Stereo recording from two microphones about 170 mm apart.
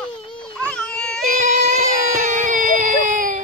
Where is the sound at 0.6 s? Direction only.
5° left (ahead or behind).